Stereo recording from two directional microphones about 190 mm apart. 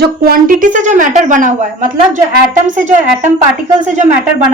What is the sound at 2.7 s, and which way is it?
Speech, 40° right (ahead or behind).